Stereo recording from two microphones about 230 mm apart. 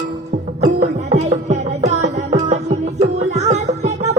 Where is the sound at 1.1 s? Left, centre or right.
Right.